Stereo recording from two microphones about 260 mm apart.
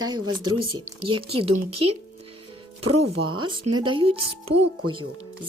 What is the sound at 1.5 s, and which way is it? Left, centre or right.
Speech, right.